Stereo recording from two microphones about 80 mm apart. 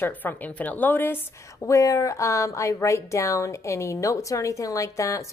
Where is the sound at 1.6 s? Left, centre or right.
Left.